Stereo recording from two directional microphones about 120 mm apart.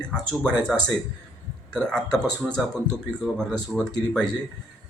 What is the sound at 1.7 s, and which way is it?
Speech, 5° left (ahead or behind).